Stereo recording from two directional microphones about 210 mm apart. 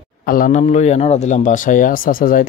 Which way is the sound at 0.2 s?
40° left (ahead or behind).